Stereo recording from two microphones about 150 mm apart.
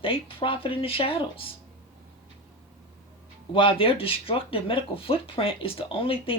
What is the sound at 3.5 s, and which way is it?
Speech, 35° left (ahead or behind).